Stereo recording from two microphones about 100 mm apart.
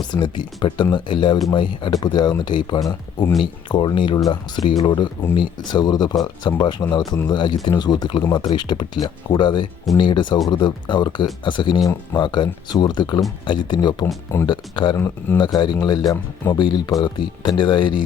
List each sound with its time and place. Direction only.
0.1 s speech: 50° left (ahead or behind)
1.9 s speech: 45° left (ahead or behind)
14.9 s speech: 25° left (ahead or behind)
15.5 s speech: 45° left (ahead or behind)